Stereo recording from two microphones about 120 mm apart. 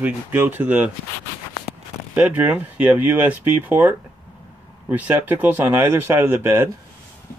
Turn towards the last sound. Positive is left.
turn(degrees=-20)  # may be behind; listen again after turning